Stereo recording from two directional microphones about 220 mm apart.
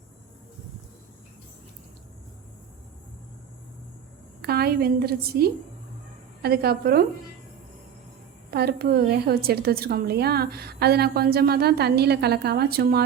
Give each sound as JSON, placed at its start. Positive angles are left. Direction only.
{"t": 4.4, "sound": "a woman's voice", "side_deg": -45}
{"t": 8.4, "sound": "a woman's voice", "side_deg": -45}